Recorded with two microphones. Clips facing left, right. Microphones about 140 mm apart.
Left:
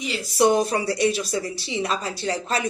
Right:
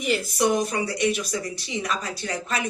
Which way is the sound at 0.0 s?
50° right (ahead or behind).